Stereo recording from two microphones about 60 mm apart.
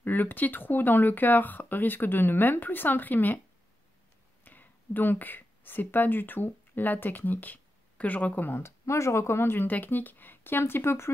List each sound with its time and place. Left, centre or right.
0.0 s speech: left
4.5 s speech: left